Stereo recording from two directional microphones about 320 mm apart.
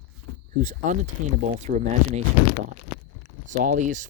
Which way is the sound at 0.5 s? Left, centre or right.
Right.